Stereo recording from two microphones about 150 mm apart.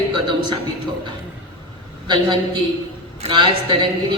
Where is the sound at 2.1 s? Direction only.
30° right (ahead or behind).